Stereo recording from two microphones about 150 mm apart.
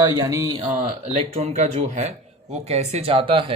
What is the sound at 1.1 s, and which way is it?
Speech, 45° right (ahead or behind).